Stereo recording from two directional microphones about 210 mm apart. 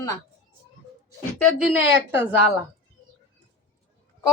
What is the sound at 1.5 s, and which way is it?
Speech, 5° right (ahead or behind).